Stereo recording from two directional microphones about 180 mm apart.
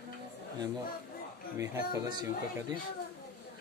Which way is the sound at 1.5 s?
20° right (ahead or behind).